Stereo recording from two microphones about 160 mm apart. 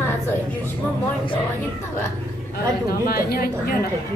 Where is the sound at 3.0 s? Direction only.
70° left (ahead or behind).